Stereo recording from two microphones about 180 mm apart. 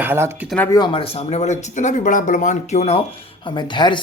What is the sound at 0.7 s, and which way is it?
Speech, 25° left (ahead or behind).